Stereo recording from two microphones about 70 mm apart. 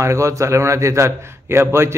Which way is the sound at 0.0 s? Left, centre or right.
Right.